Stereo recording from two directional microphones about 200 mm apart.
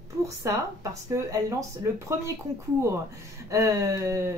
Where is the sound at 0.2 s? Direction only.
15° right (ahead or behind).